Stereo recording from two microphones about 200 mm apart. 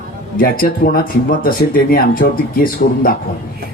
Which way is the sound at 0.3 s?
45° left (ahead or behind).